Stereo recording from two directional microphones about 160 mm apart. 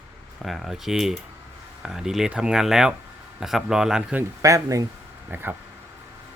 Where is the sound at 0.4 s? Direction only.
Centre (ahead or behind).